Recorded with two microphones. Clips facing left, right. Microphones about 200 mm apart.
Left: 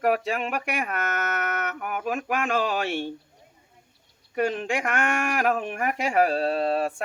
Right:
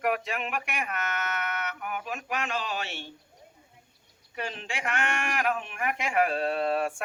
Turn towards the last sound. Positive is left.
turn(degrees=35)  # may be behind; listen again after turning